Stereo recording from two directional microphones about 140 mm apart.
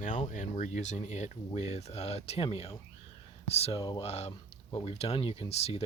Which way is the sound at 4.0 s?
50° left (ahead or behind).